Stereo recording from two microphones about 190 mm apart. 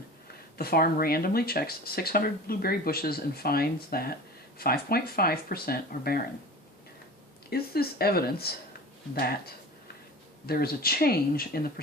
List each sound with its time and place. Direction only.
0.6 s speech: 55° left (ahead or behind)
7.5 s speech: 55° left (ahead or behind)